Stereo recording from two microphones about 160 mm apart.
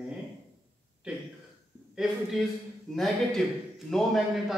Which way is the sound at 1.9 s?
5° right (ahead or behind).